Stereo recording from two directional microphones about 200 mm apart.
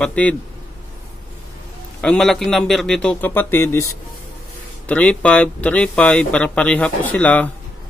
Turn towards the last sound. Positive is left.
turn(degrees=5)  # may be behind; listen again after turning